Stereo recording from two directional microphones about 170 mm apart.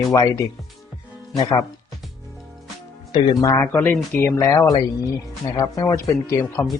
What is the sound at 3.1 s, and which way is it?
Speech, 25° left (ahead or behind).